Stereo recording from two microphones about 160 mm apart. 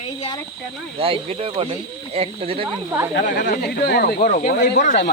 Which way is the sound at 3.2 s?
65° left (ahead or behind).